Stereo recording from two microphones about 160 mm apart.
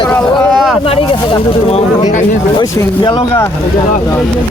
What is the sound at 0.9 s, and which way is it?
Speech, 35° left (ahead or behind).